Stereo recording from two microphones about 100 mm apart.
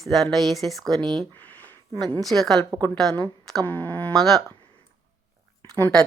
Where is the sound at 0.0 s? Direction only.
Centre (ahead or behind).